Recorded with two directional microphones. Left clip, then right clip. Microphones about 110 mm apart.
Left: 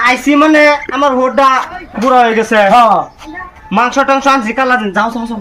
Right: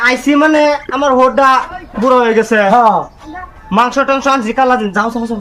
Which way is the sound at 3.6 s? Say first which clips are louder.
Left 1 dB; 40° right (ahead or behind).